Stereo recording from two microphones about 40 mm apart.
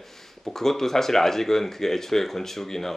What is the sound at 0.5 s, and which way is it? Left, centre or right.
Speech, centre.